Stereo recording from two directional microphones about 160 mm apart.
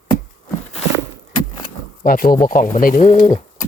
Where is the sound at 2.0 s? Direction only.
65° left (ahead or behind); by 3.4 s 50° left (ahead or behind).